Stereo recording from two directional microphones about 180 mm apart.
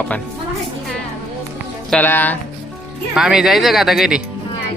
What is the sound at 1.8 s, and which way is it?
Speech, 10° left (ahead or behind).